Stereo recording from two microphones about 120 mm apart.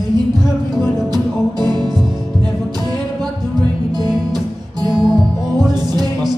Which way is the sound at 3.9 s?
35° right (ahead or behind).